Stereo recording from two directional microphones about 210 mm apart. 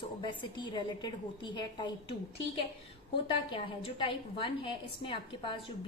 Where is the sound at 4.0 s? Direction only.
25° left (ahead or behind).